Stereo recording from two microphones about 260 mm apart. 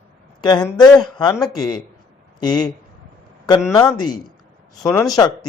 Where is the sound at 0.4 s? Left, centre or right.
Centre.